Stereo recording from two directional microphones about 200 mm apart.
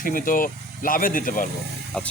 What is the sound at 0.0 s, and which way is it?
Speech, 45° left (ahead or behind).